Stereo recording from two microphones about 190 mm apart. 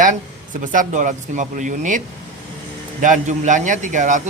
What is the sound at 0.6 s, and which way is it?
A man's voice, 45° right (ahead or behind).